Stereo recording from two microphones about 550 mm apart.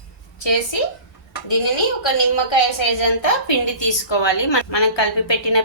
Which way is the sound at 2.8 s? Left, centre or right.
Left.